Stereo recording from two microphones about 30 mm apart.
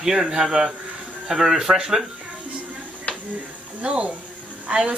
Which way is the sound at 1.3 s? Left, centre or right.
Centre.